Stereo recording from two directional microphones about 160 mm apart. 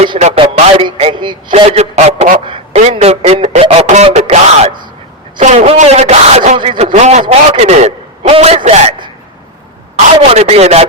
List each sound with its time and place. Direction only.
0.2 s a man's voice: 45° right (ahead or behind)
3.2 s a sound: 40° right (ahead or behind)
5.4 s a man's voice: 45° right (ahead or behind)